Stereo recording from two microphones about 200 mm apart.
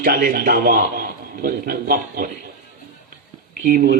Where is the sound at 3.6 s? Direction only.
45° right (ahead or behind).